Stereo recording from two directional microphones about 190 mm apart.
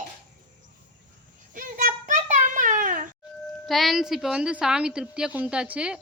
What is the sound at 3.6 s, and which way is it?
A woman's voice, centre (ahead or behind).